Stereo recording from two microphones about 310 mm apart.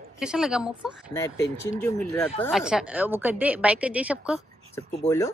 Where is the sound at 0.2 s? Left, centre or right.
Centre.